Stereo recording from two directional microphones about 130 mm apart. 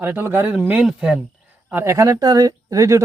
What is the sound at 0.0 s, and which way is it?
Speech, 15° right (ahead or behind).